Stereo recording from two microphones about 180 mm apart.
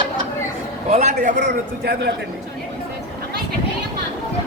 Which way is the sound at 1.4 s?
60° right (ahead or behind).